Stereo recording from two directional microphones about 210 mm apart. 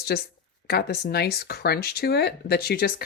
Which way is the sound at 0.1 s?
50° left (ahead or behind).